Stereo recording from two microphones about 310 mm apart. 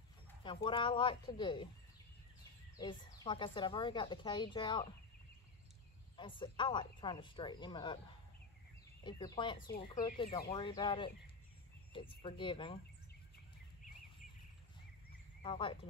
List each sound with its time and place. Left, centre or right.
0.4 s speech: centre
2.8 s speech: centre
6.1 s speech: centre
9.0 s speech: centre
15.4 s speech: centre